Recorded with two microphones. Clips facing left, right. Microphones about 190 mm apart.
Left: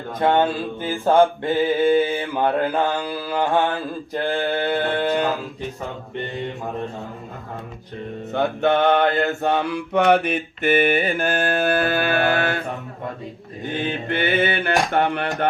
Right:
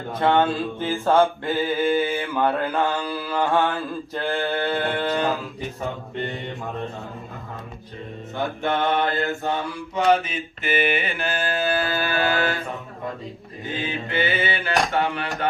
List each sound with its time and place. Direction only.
0.2 s mantra: 15° left (ahead or behind)
8.3 s mantra: 65° left (ahead or behind)
13.7 s mantra: 60° left (ahead or behind)